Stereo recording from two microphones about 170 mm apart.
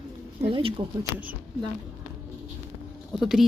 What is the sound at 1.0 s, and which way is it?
Speech, 10° right (ahead or behind).